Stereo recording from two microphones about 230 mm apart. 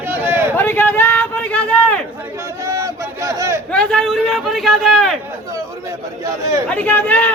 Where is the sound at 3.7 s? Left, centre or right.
Centre.